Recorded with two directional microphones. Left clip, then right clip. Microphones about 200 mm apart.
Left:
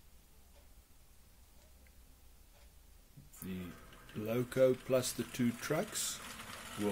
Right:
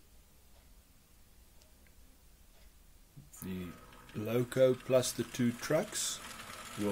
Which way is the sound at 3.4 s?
15° right (ahead or behind).